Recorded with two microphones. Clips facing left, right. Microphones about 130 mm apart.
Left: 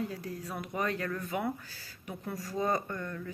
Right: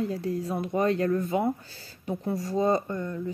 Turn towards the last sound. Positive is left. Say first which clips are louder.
# right 7 dB
turn(degrees=-20)  # may be behind; listen again after turning